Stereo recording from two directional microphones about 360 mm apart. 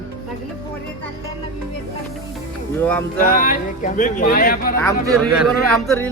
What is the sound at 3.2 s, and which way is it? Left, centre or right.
Speech, left.